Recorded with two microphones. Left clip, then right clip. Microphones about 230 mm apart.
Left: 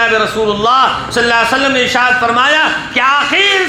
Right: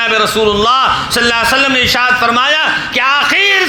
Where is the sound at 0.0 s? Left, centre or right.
Right.